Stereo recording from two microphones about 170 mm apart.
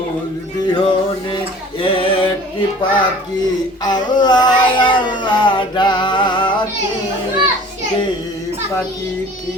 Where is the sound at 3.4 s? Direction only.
25° left (ahead or behind).